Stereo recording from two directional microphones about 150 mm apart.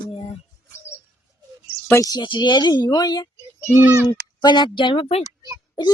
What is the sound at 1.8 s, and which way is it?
Speech, 20° left (ahead or behind).